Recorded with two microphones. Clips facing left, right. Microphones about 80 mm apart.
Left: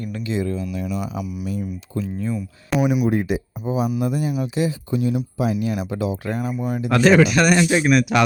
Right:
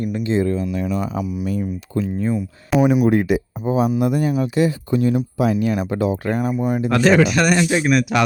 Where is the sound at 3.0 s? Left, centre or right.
Right.